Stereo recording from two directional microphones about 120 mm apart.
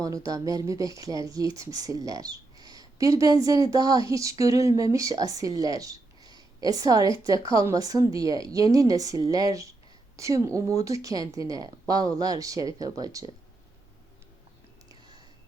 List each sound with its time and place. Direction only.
0.3 s speech: 30° right (ahead or behind)